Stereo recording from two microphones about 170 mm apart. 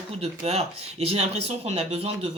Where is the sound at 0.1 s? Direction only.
35° right (ahead or behind).